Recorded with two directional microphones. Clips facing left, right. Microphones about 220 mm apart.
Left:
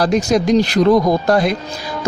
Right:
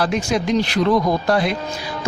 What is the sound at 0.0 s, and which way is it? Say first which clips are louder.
Speech: left 5 dB; 40° left (ahead or behind).